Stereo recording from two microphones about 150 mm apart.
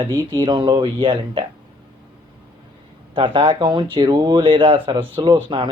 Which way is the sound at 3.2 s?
35° right (ahead or behind).